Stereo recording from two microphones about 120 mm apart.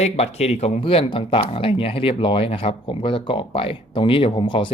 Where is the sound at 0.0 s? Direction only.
60° left (ahead or behind).